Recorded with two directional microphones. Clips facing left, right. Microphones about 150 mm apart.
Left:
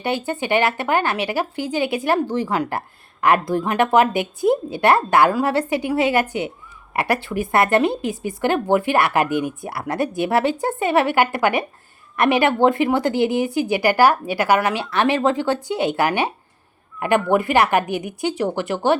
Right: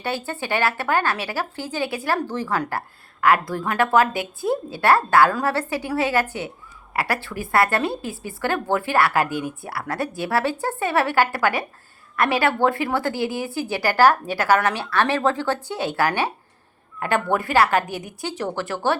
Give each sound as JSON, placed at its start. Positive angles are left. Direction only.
{"t": 0.0, "sound": "a woman's voice", "side_deg": 15}